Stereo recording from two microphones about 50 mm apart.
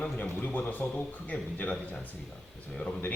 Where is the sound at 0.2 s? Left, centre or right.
Left.